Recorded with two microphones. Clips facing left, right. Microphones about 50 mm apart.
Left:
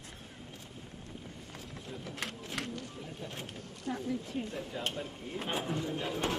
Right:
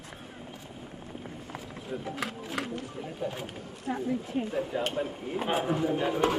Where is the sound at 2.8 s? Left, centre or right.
Right.